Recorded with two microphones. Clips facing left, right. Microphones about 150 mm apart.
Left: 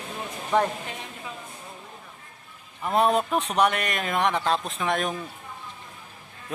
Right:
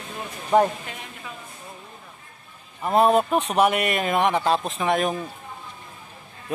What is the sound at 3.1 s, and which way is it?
Speech, centre (ahead or behind).